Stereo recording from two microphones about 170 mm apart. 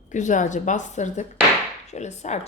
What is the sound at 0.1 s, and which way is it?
Speech, 45° left (ahead or behind).